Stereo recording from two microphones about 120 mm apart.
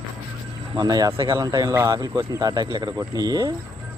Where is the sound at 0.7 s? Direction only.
35° right (ahead or behind).